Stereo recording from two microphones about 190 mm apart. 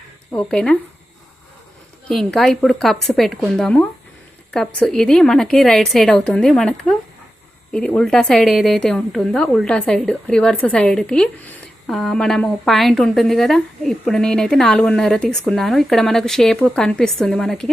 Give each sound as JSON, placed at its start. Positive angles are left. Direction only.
{"t": 0.3, "sound": "a woman's voice", "side_deg": 5}
{"t": 2.0, "sound": "a woman's voice", "side_deg": 0}